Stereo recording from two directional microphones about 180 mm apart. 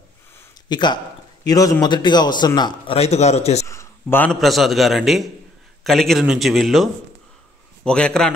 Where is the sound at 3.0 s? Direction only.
35° left (ahead or behind).